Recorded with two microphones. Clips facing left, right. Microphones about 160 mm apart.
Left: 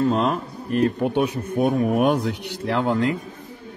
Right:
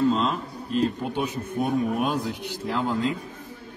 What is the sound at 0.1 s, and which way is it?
A man's voice, 60° left (ahead or behind).